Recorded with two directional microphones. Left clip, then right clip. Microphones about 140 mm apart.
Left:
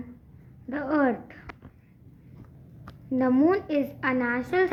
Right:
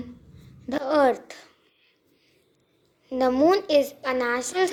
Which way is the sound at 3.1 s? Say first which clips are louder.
Right 3 dB; 30° right (ahead or behind).